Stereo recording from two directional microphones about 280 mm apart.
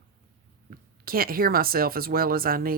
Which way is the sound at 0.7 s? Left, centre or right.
Right.